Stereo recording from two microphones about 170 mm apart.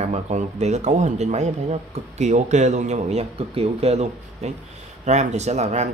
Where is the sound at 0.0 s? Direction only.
40° right (ahead or behind).